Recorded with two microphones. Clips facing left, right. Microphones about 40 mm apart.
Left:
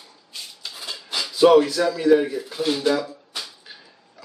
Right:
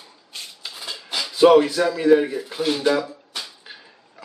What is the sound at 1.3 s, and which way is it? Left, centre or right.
Speech, right.